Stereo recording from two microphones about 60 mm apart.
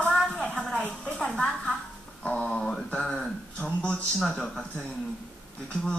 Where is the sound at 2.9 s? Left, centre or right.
Centre.